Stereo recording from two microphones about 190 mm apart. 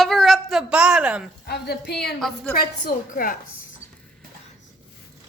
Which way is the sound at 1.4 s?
55° left (ahead or behind).